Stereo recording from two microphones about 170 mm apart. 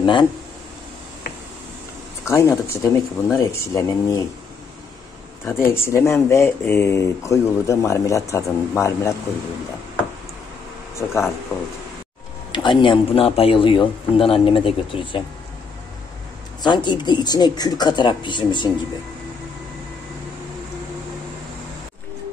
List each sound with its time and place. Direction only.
0.0 s speech: 30° left (ahead or behind)
2.2 s speech: 15° left (ahead or behind)
5.4 s speech: 15° left (ahead or behind)
11.0 s speech: 10° left (ahead or behind)
12.5 s a man's voice: 30° left (ahead or behind)
16.6 s speech: 25° left (ahead or behind)